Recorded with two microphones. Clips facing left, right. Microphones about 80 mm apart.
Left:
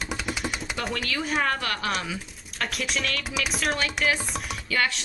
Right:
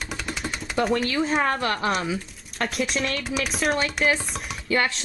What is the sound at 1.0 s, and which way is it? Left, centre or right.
Speech, right.